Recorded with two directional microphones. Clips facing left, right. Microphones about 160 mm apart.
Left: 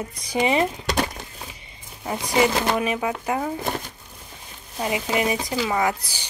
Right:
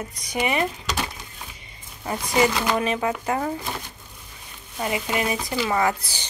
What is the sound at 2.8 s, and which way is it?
Speech, 10° left (ahead or behind).